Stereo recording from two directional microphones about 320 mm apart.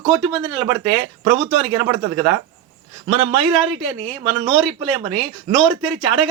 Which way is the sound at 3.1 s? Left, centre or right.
Centre.